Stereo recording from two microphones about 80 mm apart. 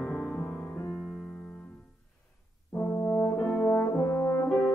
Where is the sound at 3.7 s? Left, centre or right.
Left.